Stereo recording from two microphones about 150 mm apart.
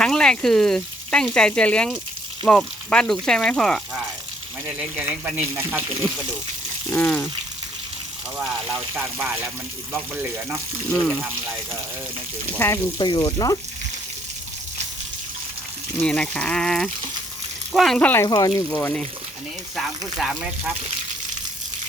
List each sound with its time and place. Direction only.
0.0 s frying: 5° left (ahead or behind)
2.5 s speech: 5° left (ahead or behind)
4.6 s speech: 10° right (ahead or behind)
6.9 s speech: 5° left (ahead or behind)
8.4 s speech: centre (ahead or behind)
11.0 s speech: centre (ahead or behind)
12.5 s speech: 15° left (ahead or behind)
13.0 s speech: 30° left (ahead or behind)
16.0 s speech: 5° left (ahead or behind)
18.3 s speech: 25° left (ahead or behind)
18.7 s speech: 15° left (ahead or behind)
19.7 s speech: centre (ahead or behind)